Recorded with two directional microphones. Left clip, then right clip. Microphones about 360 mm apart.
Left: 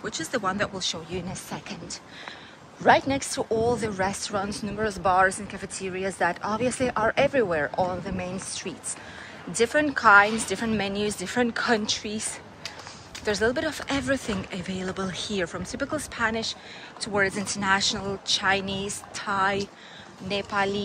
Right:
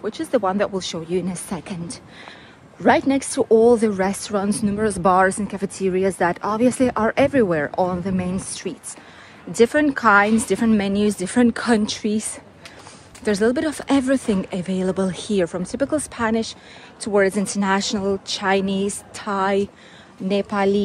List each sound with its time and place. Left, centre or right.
0.0 s speech: centre